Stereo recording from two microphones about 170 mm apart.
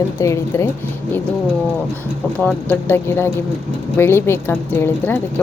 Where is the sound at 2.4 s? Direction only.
5° left (ahead or behind).